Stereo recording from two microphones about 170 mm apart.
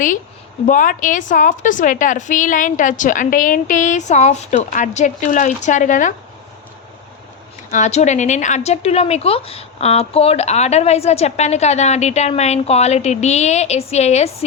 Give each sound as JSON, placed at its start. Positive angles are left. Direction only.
{"t": 0.7, "sound": "a woman's voice", "side_deg": 50}
{"t": 7.7, "sound": "a woman's voice", "side_deg": 45}